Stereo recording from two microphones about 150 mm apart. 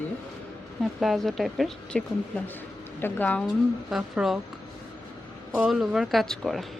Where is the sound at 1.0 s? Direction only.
Centre (ahead or behind).